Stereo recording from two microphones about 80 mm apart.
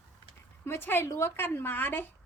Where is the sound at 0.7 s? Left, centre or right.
Left.